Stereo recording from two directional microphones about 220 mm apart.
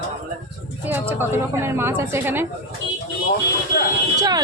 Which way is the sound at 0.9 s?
10° right (ahead or behind).